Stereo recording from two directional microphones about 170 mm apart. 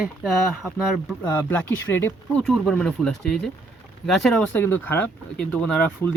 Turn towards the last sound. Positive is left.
turn(degrees=5)  # may be behind; listen again after turning